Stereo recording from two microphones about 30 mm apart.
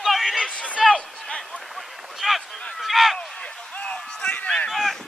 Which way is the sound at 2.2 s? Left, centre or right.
Centre.